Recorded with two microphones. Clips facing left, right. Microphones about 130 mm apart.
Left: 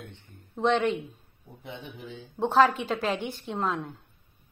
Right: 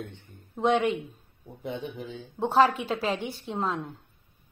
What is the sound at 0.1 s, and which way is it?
Speech, 10° right (ahead or behind).